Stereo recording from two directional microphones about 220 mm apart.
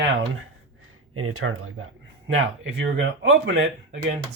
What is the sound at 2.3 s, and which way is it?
Speech, 60° right (ahead or behind).